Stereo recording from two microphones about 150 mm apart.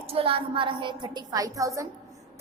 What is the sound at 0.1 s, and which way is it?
A woman's voice, 40° right (ahead or behind).